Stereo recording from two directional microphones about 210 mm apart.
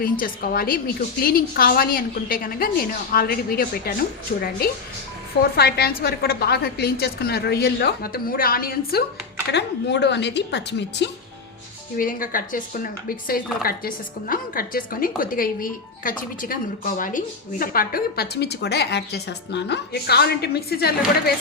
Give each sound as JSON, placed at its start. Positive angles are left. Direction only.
{"t": 0.0, "sound": "speech", "side_deg": 45}
{"t": 5.4, "sound": "speech", "side_deg": 50}
{"t": 11.9, "sound": "speech", "side_deg": 40}